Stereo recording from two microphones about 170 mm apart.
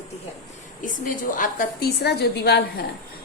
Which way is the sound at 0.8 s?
50° left (ahead or behind).